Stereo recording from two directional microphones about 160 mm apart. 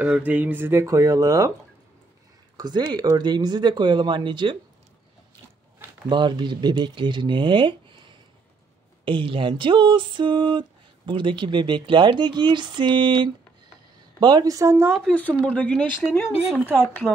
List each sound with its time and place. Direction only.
0.0 s speech: 10° right (ahead or behind)
2.5 s speech: 25° right (ahead or behind)
6.0 s speech: 30° right (ahead or behind)
9.0 s a sound: 30° right (ahead or behind)
11.1 s speech: 30° right (ahead or behind)
15.0 s speech: 5° left (ahead or behind)